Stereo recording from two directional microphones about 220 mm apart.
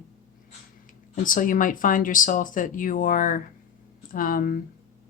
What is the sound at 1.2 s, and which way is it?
Speech, 40° left (ahead or behind).